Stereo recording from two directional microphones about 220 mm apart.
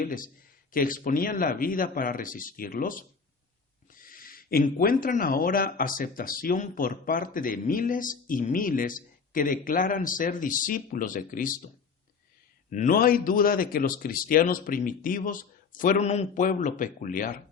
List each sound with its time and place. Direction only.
0.0 s speech: 40° left (ahead or behind)
12.7 s speech: 35° left (ahead or behind)